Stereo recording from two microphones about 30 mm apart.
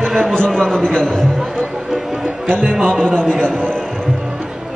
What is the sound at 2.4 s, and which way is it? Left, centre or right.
Speech, left.